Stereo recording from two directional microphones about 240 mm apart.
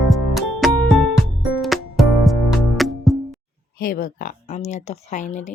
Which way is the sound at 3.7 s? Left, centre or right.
Left.